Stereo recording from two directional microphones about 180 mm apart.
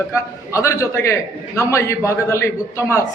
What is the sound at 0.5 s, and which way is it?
A man's voice, 15° left (ahead or behind).